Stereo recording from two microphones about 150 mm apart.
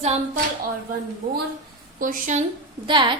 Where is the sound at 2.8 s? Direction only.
30° right (ahead or behind).